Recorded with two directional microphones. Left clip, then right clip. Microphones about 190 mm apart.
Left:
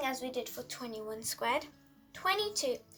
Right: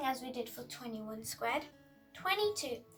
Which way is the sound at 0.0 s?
50° left (ahead or behind).